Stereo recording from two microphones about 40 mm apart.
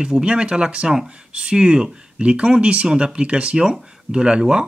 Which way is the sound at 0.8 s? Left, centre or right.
Centre.